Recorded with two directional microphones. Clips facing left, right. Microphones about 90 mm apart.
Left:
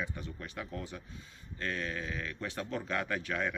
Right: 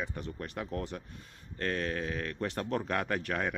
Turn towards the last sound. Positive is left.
turn(degrees=-50)  # may be behind; listen again after turning